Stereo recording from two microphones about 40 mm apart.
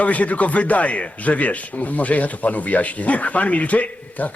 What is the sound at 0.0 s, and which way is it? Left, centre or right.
A man's voice, left.